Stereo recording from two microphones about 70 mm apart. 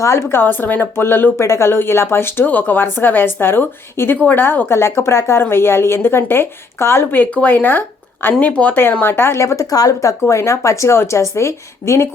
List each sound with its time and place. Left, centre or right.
0.0 s a woman's voice: left
9.6 s speech: left